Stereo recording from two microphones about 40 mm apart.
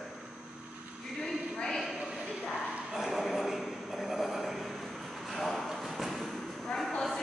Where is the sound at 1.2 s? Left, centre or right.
Centre.